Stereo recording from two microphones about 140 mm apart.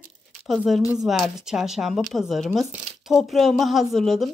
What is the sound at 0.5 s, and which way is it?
Speech, centre (ahead or behind).